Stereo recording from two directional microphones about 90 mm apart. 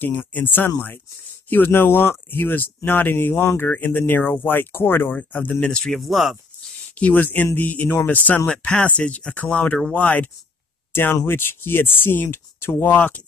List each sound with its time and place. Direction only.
0.0 s speech: 20° left (ahead or behind); by 6.7 s centre (ahead or behind)
7.0 s speech: 15° left (ahead or behind)